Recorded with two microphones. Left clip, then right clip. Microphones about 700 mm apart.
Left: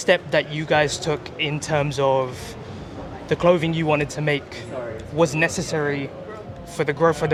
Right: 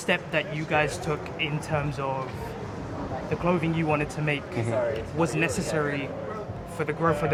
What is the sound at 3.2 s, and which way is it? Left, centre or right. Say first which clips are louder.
Speech: left 9 dB; left.